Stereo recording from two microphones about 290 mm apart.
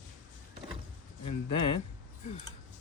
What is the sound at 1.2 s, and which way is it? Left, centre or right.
Speech, left.